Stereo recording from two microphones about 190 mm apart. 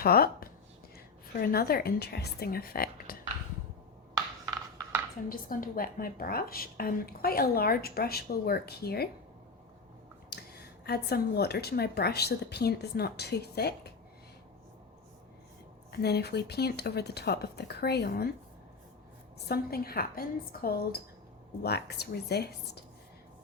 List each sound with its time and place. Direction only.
0.0 s a woman's voice: 55° left (ahead or behind)
4.1 s a sound: 20° right (ahead or behind)
5.3 s a woman's voice: 45° left (ahead or behind)
10.2 s a woman's voice: 55° left (ahead or behind)
15.9 s a woman's voice: 55° left (ahead or behind)
19.5 s a woman's voice: 55° left (ahead or behind)